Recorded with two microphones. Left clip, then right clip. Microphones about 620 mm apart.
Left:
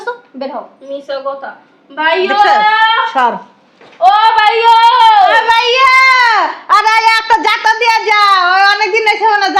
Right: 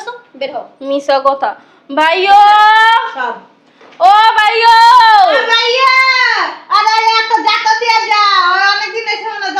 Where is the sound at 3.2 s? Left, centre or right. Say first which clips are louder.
Left 7 dB; left.